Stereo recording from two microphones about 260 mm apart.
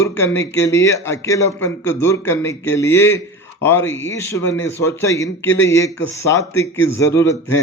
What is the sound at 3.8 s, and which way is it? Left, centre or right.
Speech, left.